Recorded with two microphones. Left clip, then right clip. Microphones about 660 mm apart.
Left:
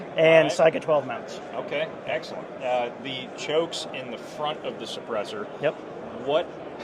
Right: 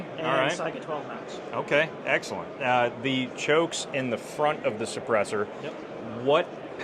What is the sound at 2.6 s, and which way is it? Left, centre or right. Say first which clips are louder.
Speech: right 2 dB; right.